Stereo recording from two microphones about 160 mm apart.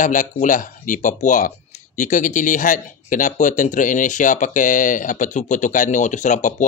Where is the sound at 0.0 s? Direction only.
55° left (ahead or behind).